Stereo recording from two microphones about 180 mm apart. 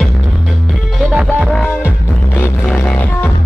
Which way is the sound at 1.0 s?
5° right (ahead or behind).